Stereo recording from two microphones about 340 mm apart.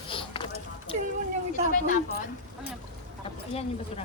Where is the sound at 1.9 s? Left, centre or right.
Left.